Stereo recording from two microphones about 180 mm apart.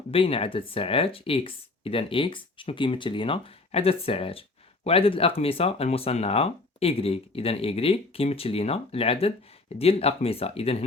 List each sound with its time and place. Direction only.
0.1 s speech: 30° left (ahead or behind)